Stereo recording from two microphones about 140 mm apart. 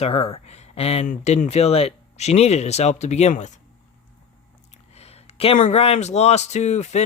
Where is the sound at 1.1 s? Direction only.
60° left (ahead or behind).